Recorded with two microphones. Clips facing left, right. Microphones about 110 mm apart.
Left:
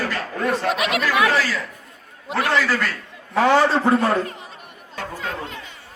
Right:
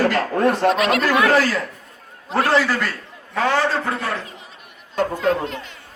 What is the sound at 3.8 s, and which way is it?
Speech, 35° left (ahead or behind).